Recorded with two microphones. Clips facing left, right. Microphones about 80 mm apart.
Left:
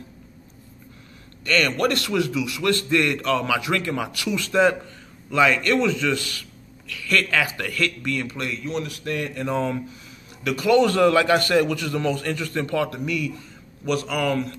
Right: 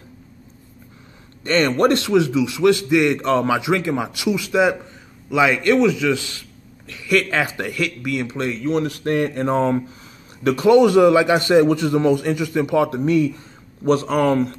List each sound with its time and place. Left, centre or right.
1.4 s a man's voice: right
3.6 s a man's voice: centre; by 10.7 s right
10.7 s a man's voice: centre
13.0 s speech: right